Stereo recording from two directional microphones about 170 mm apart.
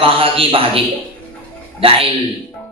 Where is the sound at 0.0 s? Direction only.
35° right (ahead or behind).